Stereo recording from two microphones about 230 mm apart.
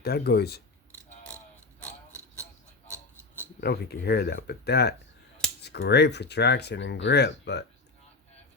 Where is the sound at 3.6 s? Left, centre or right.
Left.